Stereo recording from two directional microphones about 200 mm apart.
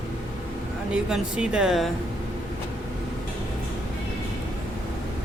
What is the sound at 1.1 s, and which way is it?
Speech, 5° right (ahead or behind).